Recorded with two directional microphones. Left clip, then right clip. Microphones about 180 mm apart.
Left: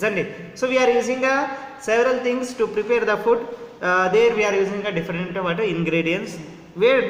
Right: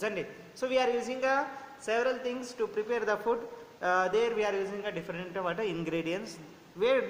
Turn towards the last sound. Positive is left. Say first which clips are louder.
# left 10 dB
turn(degrees=-35)  # may be behind; listen again after turning